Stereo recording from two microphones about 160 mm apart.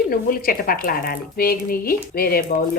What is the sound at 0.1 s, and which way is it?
Speech, 65° left (ahead or behind).